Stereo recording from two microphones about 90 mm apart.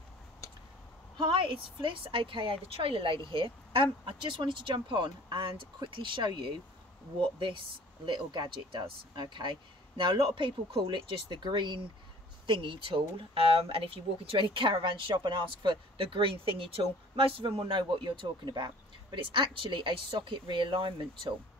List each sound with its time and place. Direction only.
1.1 s speech: 65° right (ahead or behind)
12.4 s speech: 70° right (ahead or behind)
19.1 s speech: 75° right (ahead or behind)